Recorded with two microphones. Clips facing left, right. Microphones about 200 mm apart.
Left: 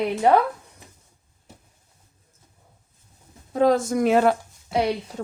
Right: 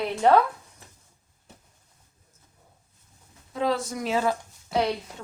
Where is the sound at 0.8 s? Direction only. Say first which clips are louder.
Left 3 dB; 15° left (ahead or behind).